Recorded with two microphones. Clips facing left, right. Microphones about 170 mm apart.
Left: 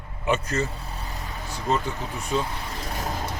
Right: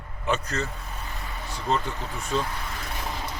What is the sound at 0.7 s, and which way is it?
Vehicle, 30° left (ahead or behind).